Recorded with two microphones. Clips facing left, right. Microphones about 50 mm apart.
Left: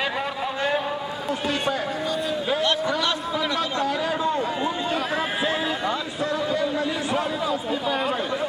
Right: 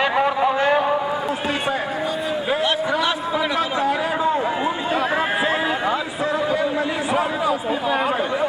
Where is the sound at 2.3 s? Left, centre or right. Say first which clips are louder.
Right 2 dB; centre.